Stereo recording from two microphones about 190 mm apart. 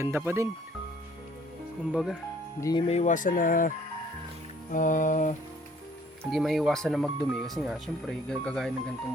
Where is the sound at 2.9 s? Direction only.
40° left (ahead or behind).